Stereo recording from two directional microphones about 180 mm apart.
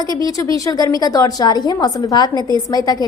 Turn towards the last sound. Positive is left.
turn(degrees=20)  # may be behind; listen again after turning